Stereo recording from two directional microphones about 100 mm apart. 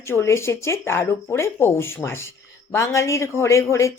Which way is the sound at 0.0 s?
25° left (ahead or behind).